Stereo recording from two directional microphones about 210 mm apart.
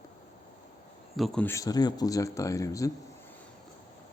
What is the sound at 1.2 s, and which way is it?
Speech, centre (ahead or behind).